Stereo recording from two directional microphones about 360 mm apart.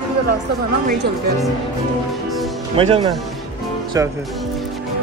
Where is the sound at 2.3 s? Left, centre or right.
Centre.